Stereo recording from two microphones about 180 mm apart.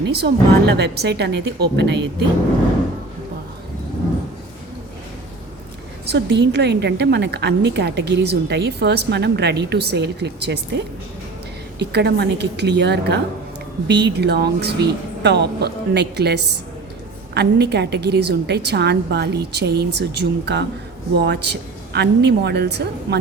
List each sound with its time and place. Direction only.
0.0 s a woman's voice: 65° right (ahead or behind)
6.1 s a woman's voice: 70° right (ahead or behind)